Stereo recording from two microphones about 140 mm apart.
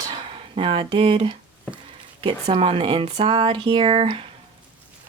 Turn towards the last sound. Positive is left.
turn(degrees=-40)  # may be behind; listen again after turning